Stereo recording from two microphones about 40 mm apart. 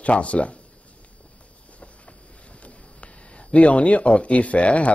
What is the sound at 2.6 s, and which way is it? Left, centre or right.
Speech, left.